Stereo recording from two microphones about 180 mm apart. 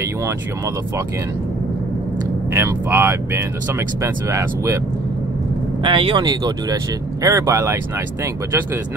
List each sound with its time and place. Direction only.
2.5 s speech: 15° right (ahead or behind)
5.9 s speech: 30° right (ahead or behind)